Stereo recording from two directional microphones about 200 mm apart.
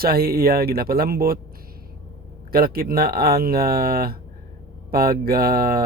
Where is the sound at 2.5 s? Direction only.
50° right (ahead or behind).